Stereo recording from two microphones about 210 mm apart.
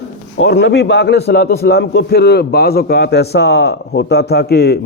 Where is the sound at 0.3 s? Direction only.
55° left (ahead or behind).